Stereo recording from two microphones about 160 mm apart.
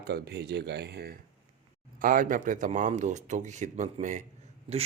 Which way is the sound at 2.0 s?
60° right (ahead or behind).